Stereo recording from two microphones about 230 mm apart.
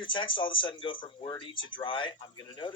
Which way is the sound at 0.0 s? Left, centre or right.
Left.